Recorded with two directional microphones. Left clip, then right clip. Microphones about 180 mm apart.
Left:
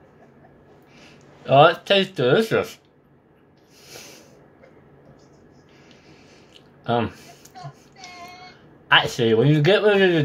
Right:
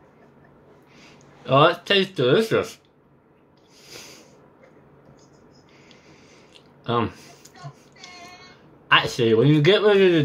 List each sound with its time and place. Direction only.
1.4 s speech: 20° right (ahead or behind)
6.8 s a sound: 20° right (ahead or behind)
8.8 s speech: 20° right (ahead or behind)